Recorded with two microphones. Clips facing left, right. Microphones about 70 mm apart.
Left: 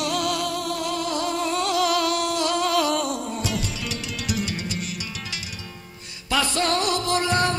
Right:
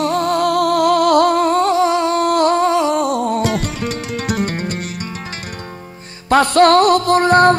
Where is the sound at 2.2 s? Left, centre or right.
Right.